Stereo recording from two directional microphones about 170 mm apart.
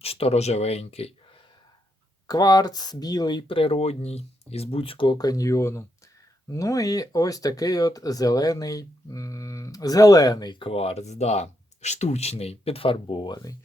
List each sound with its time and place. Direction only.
0.0 s speech: 35° left (ahead or behind)
2.2 s speech: 20° left (ahead or behind)